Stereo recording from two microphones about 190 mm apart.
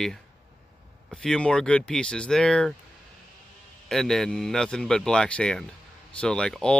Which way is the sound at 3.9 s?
Centre (ahead or behind).